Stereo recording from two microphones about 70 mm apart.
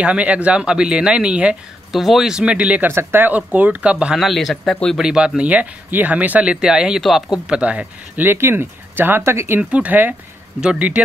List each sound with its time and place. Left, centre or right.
0.0 s speech: centre
1.9 s speech: centre
2.9 s speech: right; by 4.2 s centre
4.2 s speech: centre
4.9 s speech: centre
7.4 s speech: centre
8.3 s speech: right
9.6 s speech: centre
10.6 s speech: centre